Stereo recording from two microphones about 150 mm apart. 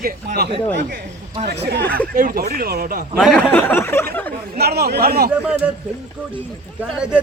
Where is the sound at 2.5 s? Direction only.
85° right.